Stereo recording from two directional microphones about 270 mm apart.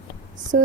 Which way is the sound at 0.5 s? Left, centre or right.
Right.